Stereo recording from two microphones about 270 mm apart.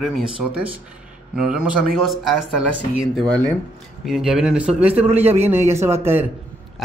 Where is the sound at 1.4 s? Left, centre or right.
Centre.